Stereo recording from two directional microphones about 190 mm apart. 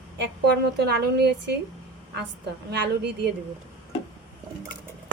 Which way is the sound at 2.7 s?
60° right (ahead or behind).